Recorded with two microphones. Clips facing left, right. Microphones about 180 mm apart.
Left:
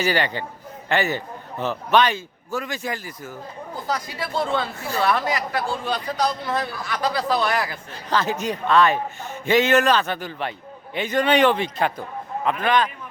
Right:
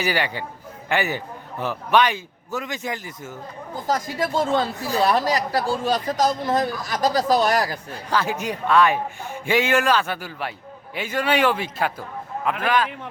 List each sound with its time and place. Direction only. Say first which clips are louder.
0.0 s a man's voice: left 2 dB; 10° right (ahead or behind)
3.8 s a man's voice: right 5 dB; 45° right (ahead or behind)
8.1 s a man's voice: left 1 dB; 10° right (ahead or behind)